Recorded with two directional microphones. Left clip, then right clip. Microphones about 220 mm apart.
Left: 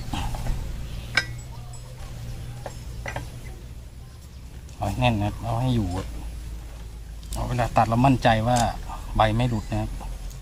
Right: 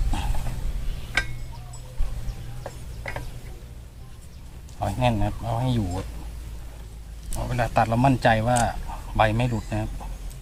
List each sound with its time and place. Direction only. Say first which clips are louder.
3.0 s tick-tock: left 1 dB; 10° right (ahead or behind)
4.8 s speech: even; 25° right (ahead or behind)
7.3 s a man's voice: left 1 dB; 25° right (ahead or behind)